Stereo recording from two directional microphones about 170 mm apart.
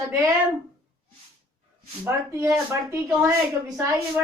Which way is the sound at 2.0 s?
15° right (ahead or behind).